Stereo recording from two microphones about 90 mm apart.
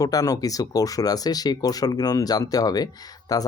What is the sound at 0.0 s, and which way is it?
Speech, 45° left (ahead or behind).